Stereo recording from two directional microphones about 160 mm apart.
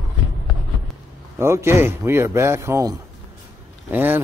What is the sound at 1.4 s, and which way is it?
Speech, 15° right (ahead or behind).